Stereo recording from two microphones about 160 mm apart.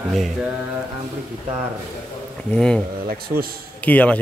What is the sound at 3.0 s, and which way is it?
Speech, 70° right (ahead or behind).